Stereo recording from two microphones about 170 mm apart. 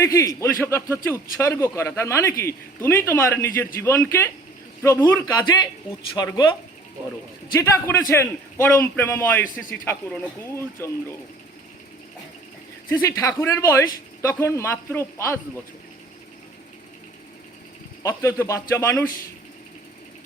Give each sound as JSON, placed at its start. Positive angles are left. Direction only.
{"t": 0.0, "sound": "a man's voice", "side_deg": 20}
{"t": 7.6, "sound": "a man's voice", "side_deg": 15}
{"t": 12.9, "sound": "a man's voice", "side_deg": 20}
{"t": 18.0, "sound": "a man's voice", "side_deg": 15}